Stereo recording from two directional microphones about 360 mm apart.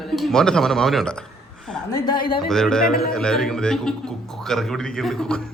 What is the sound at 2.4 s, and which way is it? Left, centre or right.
A woman's voice, centre.